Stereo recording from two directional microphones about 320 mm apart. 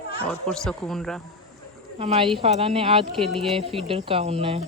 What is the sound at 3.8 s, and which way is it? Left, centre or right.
Speech, centre.